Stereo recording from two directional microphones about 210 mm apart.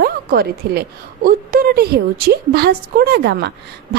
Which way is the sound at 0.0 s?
45° right (ahead or behind).